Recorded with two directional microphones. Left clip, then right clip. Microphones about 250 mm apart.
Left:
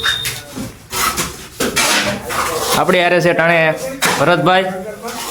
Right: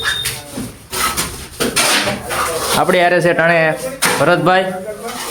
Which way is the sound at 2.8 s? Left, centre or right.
Centre.